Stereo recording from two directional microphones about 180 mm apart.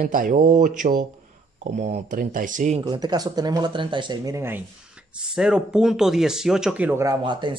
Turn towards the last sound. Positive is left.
turn(degrees=-20)  # may be behind; listen again after turning